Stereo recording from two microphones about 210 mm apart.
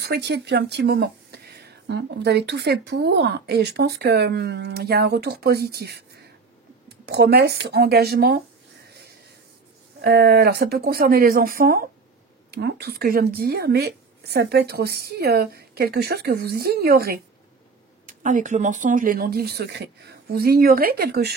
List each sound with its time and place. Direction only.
0.0 s speech: 55° right (ahead or behind)
7.1 s speech: 50° right (ahead or behind)
10.0 s speech: 50° right (ahead or behind)